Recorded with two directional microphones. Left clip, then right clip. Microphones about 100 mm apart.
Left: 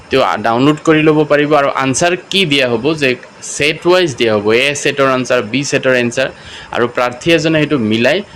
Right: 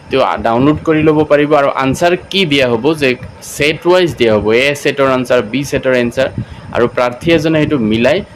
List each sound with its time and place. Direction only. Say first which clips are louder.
0.1 s speech: even; centre (ahead or behind)
0.9 s speech: right 1 dB; 5° right (ahead or behind)
2.4 s speech: right 1 dB; 25° right (ahead or behind)
3.6 s speech: right 1 dB; 10° right (ahead or behind)
7.3 s speech: left 1 dB; 15° right (ahead or behind)